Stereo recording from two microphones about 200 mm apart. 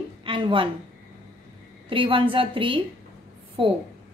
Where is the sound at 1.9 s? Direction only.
25° right (ahead or behind).